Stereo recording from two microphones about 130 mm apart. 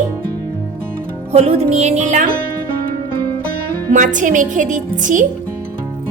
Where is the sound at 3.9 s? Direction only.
80° right.